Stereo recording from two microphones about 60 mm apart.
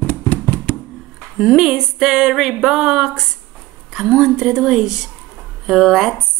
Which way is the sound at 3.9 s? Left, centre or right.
Centre.